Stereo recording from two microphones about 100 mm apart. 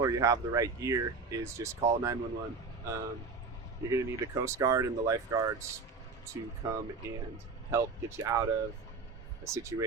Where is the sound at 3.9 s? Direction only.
30° right (ahead or behind).